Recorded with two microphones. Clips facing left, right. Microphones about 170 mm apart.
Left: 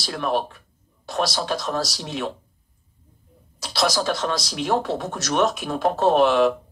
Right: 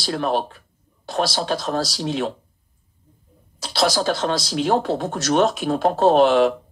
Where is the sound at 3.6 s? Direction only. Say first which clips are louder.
Right 2 dB; 30° right (ahead or behind).